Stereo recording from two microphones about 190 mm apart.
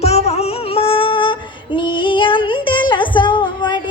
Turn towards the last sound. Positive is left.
turn(degrees=25)  # may be behind; listen again after turning